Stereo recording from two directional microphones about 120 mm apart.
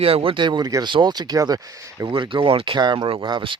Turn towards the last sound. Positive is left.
turn(degrees=-40)  # may be behind; listen again after turning